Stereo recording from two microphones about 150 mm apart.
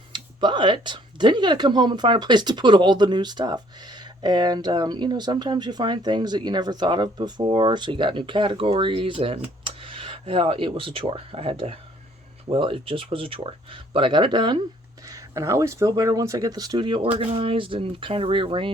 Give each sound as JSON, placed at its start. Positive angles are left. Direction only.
{"t": 0.1, "sound": "speech", "side_deg": -30}